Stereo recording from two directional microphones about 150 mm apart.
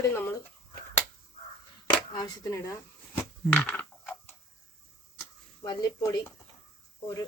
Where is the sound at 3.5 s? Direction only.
10° left (ahead or behind).